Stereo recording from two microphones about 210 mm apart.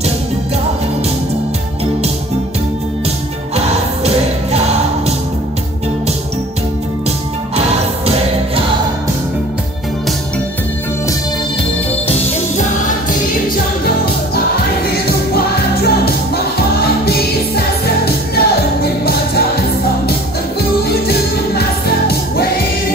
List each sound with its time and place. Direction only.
3.5 s music: 30° right (ahead or behind)
7.1 s music: 30° right (ahead or behind)
12.1 s music: 35° left (ahead or behind)
15.0 s music: 45° left (ahead or behind)
20.8 s music: 50° left (ahead or behind)